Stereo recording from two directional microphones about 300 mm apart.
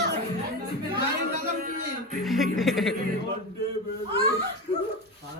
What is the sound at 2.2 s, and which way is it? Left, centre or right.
Music, centre.